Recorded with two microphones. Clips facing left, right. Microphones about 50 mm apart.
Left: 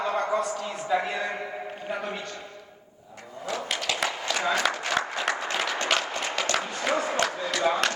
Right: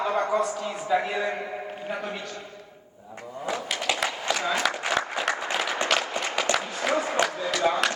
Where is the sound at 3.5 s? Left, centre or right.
Centre.